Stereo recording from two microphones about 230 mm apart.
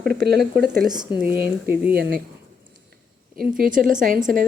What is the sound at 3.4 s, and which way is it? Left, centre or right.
Speech, right.